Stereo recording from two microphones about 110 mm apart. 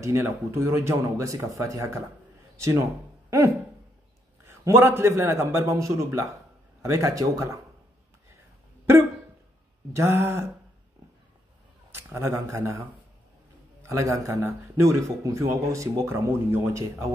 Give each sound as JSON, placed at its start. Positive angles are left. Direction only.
{"t": 0.0, "sound": "a man's voice", "side_deg": -25}
{"t": 9.9, "sound": "a man's voice", "side_deg": -25}
{"t": 11.9, "sound": "speech", "side_deg": -25}
{"t": 13.8, "sound": "a man's voice", "side_deg": -30}